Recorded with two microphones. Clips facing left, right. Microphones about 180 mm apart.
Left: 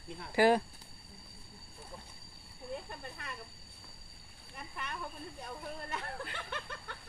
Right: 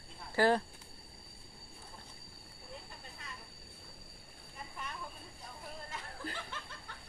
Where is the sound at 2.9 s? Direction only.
65° left (ahead or behind).